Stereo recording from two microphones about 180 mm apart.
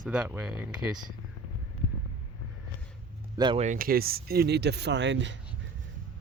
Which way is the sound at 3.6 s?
45° right (ahead or behind).